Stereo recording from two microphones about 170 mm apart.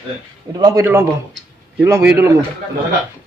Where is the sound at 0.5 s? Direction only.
20° right (ahead or behind).